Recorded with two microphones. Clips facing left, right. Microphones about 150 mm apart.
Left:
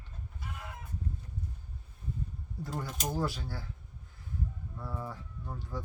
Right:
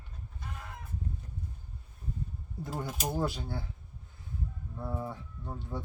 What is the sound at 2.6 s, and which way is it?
Mechanisms, 20° right (ahead or behind).